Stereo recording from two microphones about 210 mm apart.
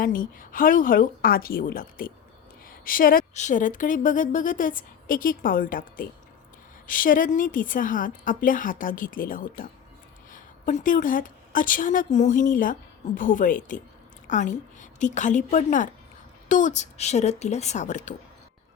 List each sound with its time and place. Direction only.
0.0 s a woman's voice: 40° left (ahead or behind)